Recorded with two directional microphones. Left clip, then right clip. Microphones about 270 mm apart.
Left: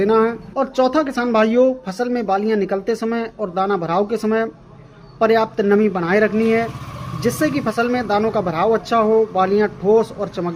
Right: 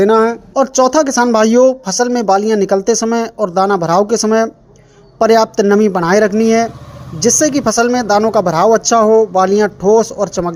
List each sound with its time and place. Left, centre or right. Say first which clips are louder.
0.0 s speech: right 6 dB; centre